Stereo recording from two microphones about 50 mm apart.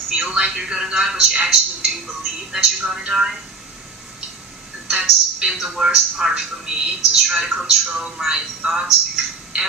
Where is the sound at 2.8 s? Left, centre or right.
Centre.